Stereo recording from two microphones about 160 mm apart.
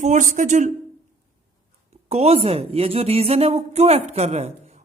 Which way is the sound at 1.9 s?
40° right (ahead or behind).